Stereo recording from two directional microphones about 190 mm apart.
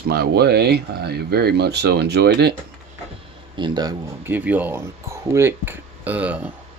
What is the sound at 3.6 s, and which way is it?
Speech, 20° right (ahead or behind).